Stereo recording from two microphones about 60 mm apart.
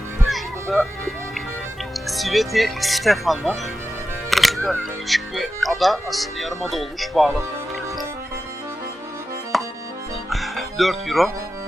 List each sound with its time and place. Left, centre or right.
0.3 s music: centre
1.9 s speech: centre
4.3 s music: centre
4.8 s speech: centre
9.5 s accordion: centre
10.2 s music: centre